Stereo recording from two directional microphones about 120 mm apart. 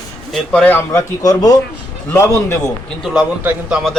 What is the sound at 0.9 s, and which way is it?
A man's voice, 30° left (ahead or behind).